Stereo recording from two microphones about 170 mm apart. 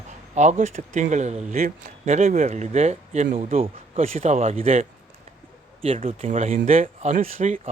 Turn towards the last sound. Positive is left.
turn(degrees=-45)  # may be behind; listen again after turning